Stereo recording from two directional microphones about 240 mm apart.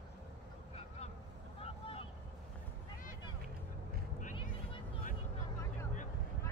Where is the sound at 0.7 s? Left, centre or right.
Left.